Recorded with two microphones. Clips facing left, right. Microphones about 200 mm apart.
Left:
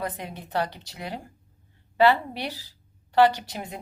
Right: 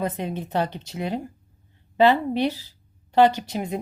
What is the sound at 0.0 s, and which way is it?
Speech, 20° right (ahead or behind).